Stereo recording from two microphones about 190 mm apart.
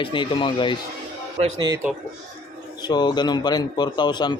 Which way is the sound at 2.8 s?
20° left (ahead or behind).